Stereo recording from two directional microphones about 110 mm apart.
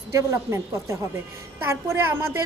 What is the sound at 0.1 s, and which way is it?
A woman's voice, 25° right (ahead or behind).